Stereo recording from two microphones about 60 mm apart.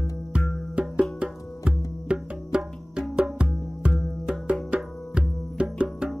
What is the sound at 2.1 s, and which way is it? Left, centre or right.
Music, centre.